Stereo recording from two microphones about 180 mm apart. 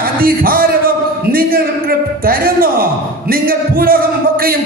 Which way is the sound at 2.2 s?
55° right (ahead or behind).